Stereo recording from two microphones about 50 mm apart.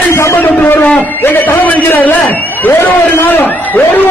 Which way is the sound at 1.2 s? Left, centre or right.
Left.